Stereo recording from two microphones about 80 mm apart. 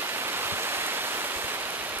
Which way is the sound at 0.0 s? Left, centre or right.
Right.